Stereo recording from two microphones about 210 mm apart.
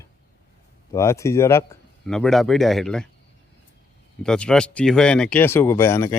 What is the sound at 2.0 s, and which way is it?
Speech, centre (ahead or behind).